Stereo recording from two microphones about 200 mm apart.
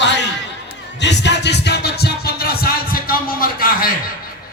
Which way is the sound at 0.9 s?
60° left (ahead or behind).